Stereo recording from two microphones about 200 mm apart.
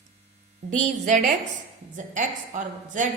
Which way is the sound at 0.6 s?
35° right (ahead or behind).